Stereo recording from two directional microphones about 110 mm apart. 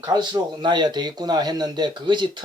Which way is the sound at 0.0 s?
40° right (ahead or behind).